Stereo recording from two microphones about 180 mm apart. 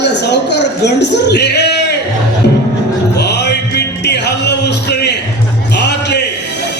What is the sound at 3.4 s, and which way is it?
Music, 70° left (ahead or behind).